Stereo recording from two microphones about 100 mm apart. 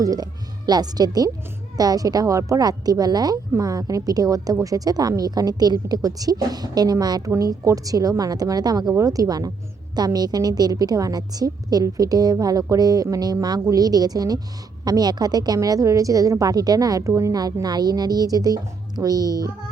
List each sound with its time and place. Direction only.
0.0 s a woman's voice: 40° right (ahead or behind)